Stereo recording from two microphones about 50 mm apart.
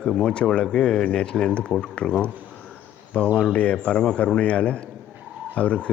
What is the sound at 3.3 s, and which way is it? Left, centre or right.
Speech, centre.